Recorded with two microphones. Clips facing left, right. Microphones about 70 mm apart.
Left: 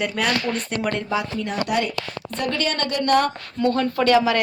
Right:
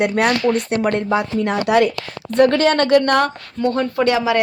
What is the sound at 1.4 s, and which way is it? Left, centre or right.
Speech, right.